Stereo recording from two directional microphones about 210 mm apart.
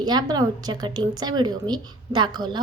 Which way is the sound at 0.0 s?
20° right (ahead or behind).